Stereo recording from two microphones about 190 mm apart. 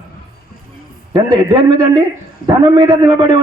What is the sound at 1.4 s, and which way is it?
Speech, 20° right (ahead or behind).